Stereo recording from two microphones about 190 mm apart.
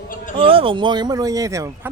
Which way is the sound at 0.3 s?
30° right (ahead or behind).